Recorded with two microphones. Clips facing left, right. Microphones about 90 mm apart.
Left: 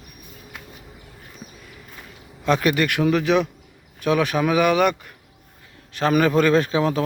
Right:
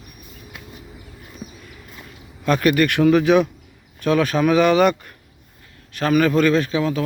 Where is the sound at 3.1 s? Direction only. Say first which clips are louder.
Right 4 dB; centre (ahead or behind).